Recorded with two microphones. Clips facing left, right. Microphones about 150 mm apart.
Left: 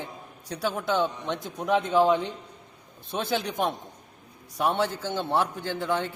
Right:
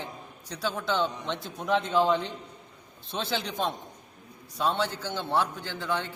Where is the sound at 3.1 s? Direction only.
20° left (ahead or behind).